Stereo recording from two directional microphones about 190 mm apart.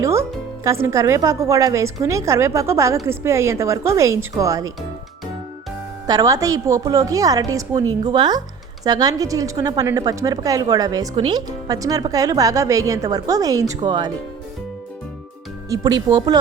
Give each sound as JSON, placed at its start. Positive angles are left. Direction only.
{"t": 0.0, "sound": "speech", "side_deg": -15}
{"t": 6.1, "sound": "a woman's voice", "side_deg": -20}
{"t": 15.7, "sound": "a woman's voice", "side_deg": -20}